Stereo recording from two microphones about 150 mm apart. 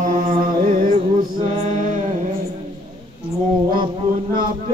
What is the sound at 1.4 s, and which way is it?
Mantra, 45° right (ahead or behind).